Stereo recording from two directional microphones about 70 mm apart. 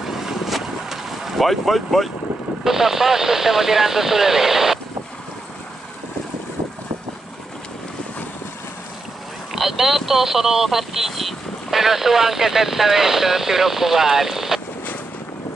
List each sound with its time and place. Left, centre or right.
0.0 s boat: centre
2.6 s speech: centre
9.5 s speech: centre